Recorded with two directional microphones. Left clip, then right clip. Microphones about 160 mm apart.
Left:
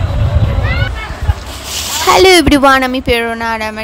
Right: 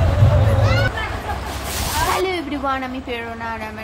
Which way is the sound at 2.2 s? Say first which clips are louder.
Left 16 dB; 90° left.